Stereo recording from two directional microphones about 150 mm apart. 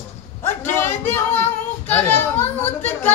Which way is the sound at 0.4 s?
15° left (ahead or behind).